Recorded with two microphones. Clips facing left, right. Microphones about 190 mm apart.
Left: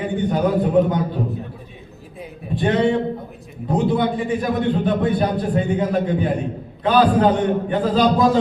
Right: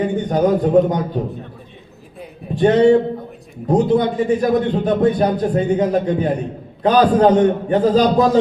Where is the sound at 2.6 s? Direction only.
40° right (ahead or behind).